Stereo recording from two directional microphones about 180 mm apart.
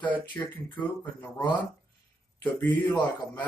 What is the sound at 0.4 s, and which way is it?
Speech, 25° left (ahead or behind).